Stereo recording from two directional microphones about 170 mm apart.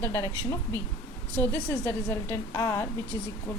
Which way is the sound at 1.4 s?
15° left (ahead or behind).